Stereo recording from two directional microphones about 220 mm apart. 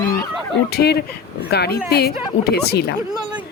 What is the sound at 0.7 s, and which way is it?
Speech, 45° left (ahead or behind).